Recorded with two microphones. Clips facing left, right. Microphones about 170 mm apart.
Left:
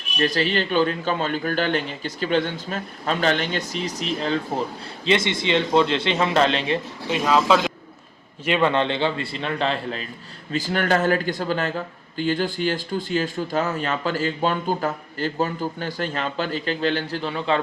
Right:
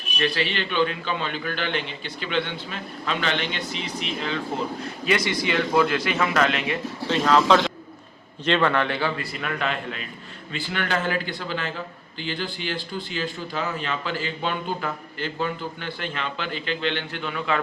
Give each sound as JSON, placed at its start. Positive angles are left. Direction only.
{"t": 0.2, "sound": "speech", "side_deg": 40}
{"t": 5.0, "sound": "a man's voice", "side_deg": 25}
{"t": 7.1, "sound": "a man's voice", "side_deg": 10}